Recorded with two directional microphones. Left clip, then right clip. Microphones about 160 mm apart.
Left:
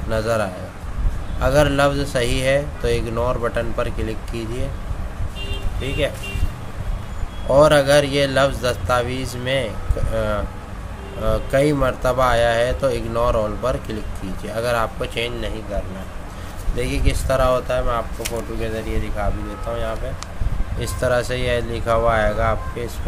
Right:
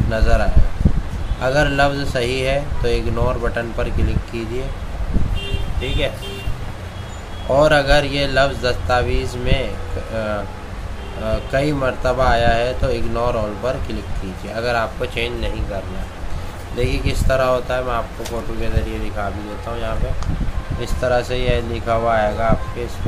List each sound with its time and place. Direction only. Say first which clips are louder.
0.1 s speech: even; 40° left (ahead or behind)
7.5 s speech: left 1 dB; 40° left (ahead or behind)
16.7 s speech: right 2 dB; 30° left (ahead or behind)
20.8 s speech: right 1 dB; 40° left (ahead or behind)